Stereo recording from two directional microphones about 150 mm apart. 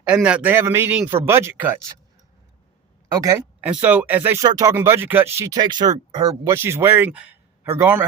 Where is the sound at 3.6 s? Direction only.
10° right (ahead or behind).